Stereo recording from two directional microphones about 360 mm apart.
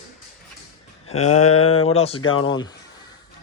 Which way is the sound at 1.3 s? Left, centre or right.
Centre.